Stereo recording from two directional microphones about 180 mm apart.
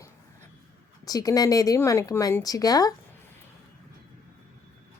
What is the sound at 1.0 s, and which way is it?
A woman's voice, 20° left (ahead or behind).